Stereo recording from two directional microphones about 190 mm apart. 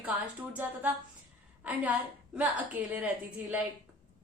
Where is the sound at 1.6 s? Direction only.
10° right (ahead or behind).